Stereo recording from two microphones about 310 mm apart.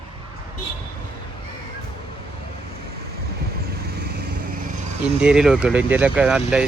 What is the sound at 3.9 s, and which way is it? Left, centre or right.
Vehicle, right.